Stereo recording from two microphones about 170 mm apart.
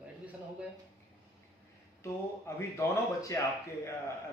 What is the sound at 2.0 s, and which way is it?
A man's voice, 15° left (ahead or behind).